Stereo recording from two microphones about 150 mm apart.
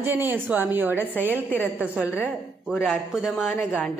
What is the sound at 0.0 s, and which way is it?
A woman's voice, 15° right (ahead or behind).